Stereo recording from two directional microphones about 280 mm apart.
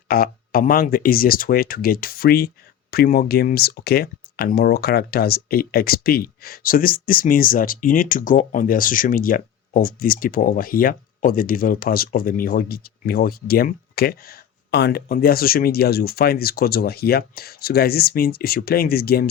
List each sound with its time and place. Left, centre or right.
0.1 s speech: left